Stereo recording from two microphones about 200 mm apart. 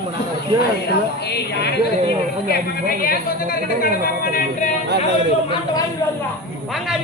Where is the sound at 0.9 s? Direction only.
55° left (ahead or behind).